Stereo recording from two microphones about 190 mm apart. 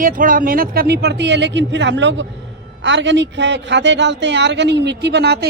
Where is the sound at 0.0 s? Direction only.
45° right (ahead or behind).